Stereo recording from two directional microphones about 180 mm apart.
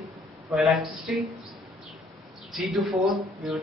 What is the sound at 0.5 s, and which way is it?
Speech, centre (ahead or behind).